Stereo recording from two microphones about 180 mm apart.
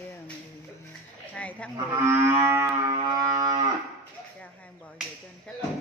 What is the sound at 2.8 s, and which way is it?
Music, 20° right (ahead or behind).